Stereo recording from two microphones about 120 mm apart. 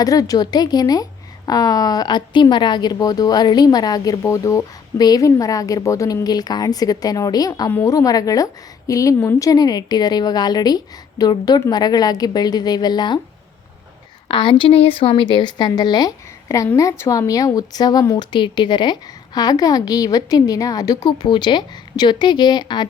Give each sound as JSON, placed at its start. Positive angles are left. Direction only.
{"t": 0.0, "sound": "a woman's voice", "side_deg": 30}
{"t": 14.3, "sound": "a woman's voice", "side_deg": 45}
{"t": 18.3, "sound": "a woman's voice", "side_deg": 40}